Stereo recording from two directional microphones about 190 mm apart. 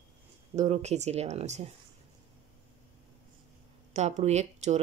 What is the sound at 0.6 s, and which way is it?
Speech, 35° right (ahead or behind).